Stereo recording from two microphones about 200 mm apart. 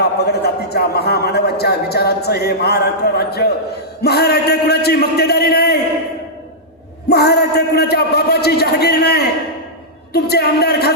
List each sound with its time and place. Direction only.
0.3 s speech: 55° left (ahead or behind)
7.1 s speech: 55° left (ahead or behind)